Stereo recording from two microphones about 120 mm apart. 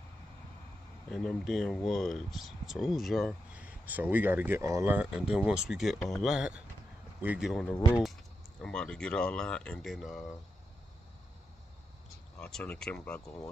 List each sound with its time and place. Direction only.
1.1 s speech: 5° left (ahead or behind)
3.5 s speech: 15° right (ahead or behind)
4.9 s speech: 5° right (ahead or behind)
7.7 s speech: 40° left (ahead or behind)
8.5 s speech: 5° left (ahead or behind)
12.4 s speech: 5° left (ahead or behind)
13.2 s speech: 30° left (ahead or behind)